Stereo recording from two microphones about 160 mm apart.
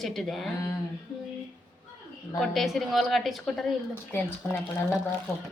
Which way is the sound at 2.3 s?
Centre (ahead or behind).